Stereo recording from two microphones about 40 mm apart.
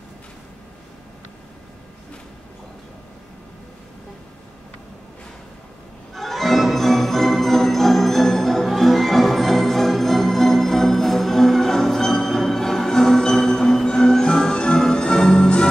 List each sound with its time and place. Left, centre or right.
6.1 s music: centre